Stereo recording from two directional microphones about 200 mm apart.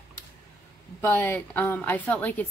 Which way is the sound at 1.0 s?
10° left (ahead or behind).